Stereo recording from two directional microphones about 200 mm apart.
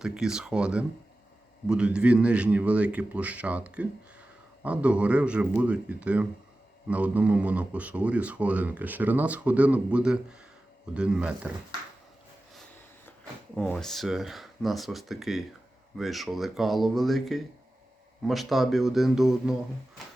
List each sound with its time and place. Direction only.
0.0 s a man's voice: 5° right (ahead or behind)
13.6 s a man's voice: 5° left (ahead or behind)